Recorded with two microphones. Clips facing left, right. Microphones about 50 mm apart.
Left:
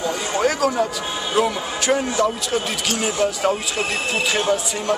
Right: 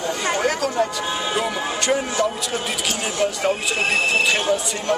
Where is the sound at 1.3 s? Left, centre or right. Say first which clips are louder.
Left 2 dB; centre.